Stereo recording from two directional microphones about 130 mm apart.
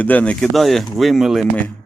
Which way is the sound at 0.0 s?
10° left (ahead or behind).